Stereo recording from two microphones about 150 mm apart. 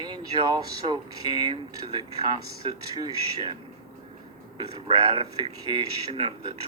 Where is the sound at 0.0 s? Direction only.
30° right (ahead or behind).